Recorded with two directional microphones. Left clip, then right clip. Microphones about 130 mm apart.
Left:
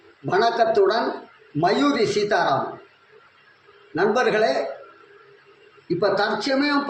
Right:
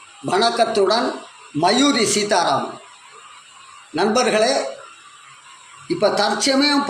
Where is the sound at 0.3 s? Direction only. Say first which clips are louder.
Right 2 dB; 15° right (ahead or behind).